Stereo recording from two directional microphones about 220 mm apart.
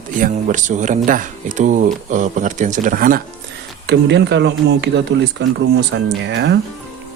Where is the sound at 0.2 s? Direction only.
35° right (ahead or behind).